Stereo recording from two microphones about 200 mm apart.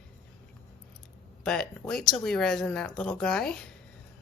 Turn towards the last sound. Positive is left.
turn(degrees=5)  # may be behind; listen again after turning